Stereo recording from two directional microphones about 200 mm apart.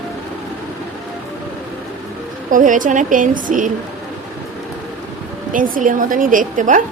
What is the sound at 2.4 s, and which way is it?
A woman's voice, 40° right (ahead or behind).